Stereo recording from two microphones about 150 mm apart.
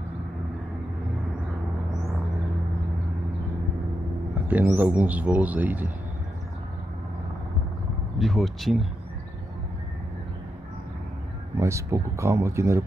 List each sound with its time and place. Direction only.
4.5 s speech: 10° right (ahead or behind)
8.2 s speech: centre (ahead or behind)
11.5 s speech: 20° right (ahead or behind)